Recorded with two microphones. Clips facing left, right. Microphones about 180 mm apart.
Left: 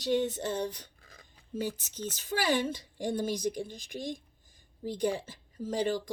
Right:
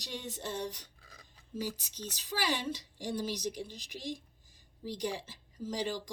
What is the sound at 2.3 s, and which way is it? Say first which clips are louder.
A woman's voice: left 5 dB; 55° left (ahead or behind).